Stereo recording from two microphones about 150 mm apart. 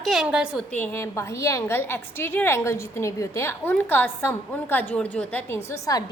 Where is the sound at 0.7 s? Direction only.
10° left (ahead or behind).